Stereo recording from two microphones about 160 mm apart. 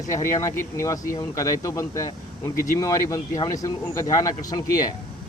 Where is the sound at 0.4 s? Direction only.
20° left (ahead or behind).